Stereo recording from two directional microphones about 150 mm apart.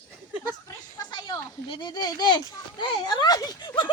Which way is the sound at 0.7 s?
25° left (ahead or behind).